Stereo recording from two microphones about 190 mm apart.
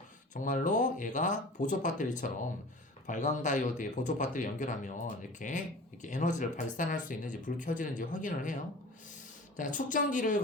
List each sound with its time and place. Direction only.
0.3 s speech: 45° left (ahead or behind)